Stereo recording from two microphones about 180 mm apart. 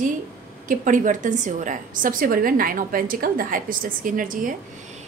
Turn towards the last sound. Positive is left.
turn(degrees=-50)  # may be behind; listen again after turning